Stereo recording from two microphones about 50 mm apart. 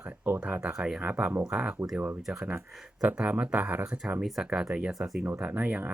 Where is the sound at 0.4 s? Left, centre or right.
Right.